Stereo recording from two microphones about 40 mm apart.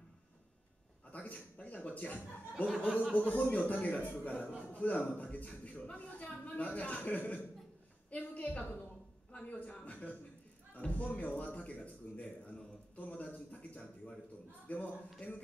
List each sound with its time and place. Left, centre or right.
1.1 s speech: left
2.5 s speech: centre
3.2 s a man's voice: left